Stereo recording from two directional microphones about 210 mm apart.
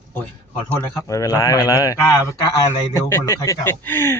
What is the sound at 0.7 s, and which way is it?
Speech, 15° left (ahead or behind).